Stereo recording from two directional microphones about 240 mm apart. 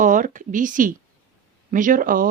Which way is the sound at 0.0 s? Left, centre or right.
Right.